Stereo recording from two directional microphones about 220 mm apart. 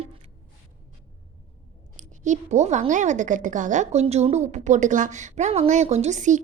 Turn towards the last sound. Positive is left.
turn(degrees=-35)  # may be behind; listen again after turning